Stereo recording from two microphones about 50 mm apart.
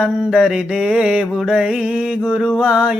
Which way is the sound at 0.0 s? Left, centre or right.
Centre.